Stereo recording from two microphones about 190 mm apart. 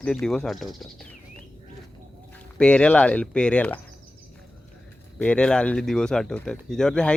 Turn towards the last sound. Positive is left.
turn(degrees=5)  # may be behind; listen again after turning